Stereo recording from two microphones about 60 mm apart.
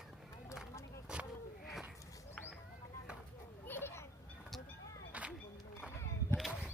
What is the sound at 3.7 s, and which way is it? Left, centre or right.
Children playing, left.